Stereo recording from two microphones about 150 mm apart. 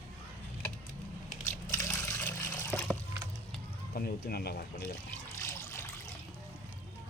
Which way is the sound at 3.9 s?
85° left.